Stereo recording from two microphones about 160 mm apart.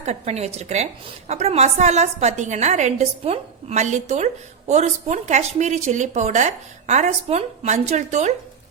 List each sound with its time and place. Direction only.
0.0 s a woman's voice: 45° right (ahead or behind)